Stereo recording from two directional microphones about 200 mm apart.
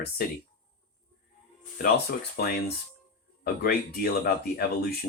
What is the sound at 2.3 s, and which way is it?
Speech, 50° left (ahead or behind).